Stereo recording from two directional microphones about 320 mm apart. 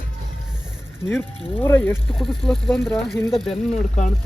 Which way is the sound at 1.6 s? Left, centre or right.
Centre.